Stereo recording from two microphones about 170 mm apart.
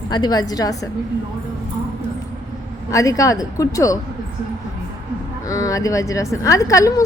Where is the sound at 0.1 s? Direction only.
25° left (ahead or behind).